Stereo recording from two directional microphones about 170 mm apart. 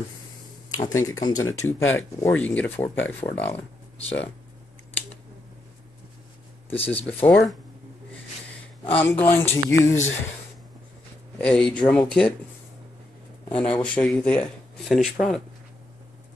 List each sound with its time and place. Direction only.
0.7 s speech: 20° left (ahead or behind)
6.9 s speech: 10° left (ahead or behind)
8.8 s speech: 10° left (ahead or behind)
11.3 s speech: 5° left (ahead or behind)
13.5 s speech: 10° left (ahead or behind)